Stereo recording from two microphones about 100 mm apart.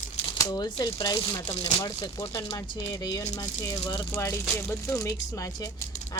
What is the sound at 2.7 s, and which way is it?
Speech, 35° left (ahead or behind).